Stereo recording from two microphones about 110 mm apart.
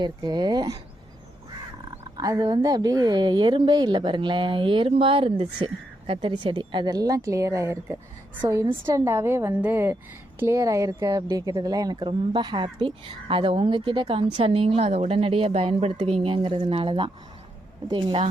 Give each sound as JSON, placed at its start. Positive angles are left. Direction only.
{"t": 0.0, "sound": "a woman's voice", "side_deg": -40}
{"t": 2.1, "sound": "speech", "side_deg": -35}
{"t": 6.3, "sound": "a woman's voice", "side_deg": -45}